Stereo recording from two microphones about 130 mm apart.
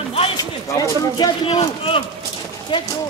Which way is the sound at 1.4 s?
45° left (ahead or behind).